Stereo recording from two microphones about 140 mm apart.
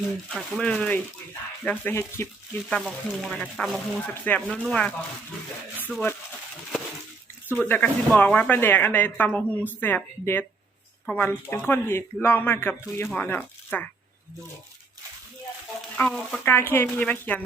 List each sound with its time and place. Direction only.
0.3 s speech: 5° left (ahead or behind)
2.6 s speech: 5° left (ahead or behind)
5.9 s speech: centre (ahead or behind)
7.5 s speech: 15° left (ahead or behind)
16.0 s speech: 5° left (ahead or behind)
16.4 s speech: 15° left (ahead or behind)